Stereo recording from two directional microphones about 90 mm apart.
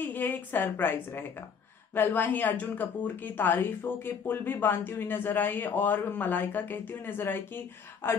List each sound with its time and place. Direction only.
0.0 s a woman's voice: 20° left (ahead or behind)